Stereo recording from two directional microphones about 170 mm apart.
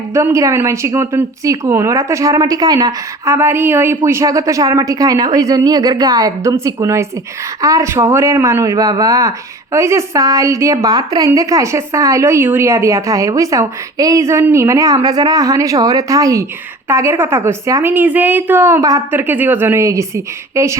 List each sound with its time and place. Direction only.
0.1 s a woman's voice: 15° right (ahead or behind)